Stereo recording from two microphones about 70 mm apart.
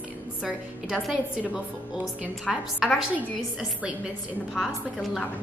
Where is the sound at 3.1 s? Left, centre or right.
Centre.